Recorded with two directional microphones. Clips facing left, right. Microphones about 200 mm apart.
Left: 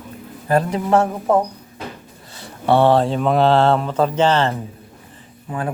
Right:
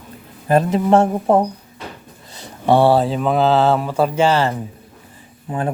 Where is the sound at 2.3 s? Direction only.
15° right (ahead or behind).